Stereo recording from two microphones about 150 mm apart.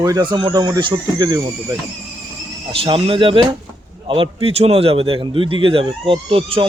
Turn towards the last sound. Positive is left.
turn(degrees=-35)  # may be behind; listen again after turning